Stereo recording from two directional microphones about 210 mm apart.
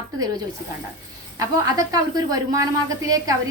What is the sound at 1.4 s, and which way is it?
A woman's voice, 15° right (ahead or behind).